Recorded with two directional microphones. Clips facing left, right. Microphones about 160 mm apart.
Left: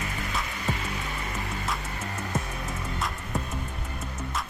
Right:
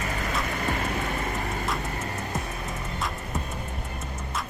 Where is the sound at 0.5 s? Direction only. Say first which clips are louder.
Right 4 dB; 55° right (ahead or behind).